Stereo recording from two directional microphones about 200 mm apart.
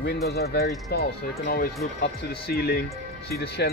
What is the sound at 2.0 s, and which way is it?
Speech, 50° left (ahead or behind).